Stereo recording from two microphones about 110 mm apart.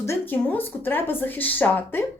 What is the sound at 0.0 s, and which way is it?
A woman's voice, 25° left (ahead or behind).